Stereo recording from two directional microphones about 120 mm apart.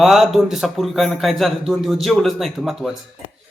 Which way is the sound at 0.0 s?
Centre (ahead or behind).